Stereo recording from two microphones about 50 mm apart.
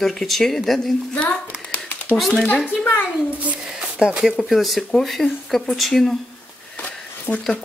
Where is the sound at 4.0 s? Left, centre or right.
Centre.